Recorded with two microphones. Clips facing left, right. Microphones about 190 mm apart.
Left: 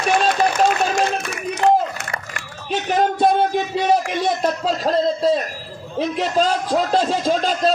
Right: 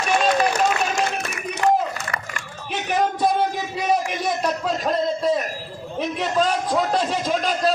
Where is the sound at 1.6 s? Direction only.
30° left (ahead or behind).